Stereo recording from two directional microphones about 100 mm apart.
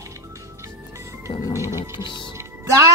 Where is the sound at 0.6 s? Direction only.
30° right (ahead or behind).